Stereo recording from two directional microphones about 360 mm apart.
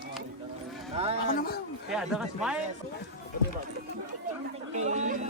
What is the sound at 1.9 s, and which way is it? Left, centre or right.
Speech, centre.